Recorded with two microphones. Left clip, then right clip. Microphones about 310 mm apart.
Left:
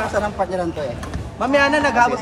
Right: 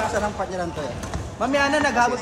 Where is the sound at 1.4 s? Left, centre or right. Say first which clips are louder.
Left 4 dB; centre.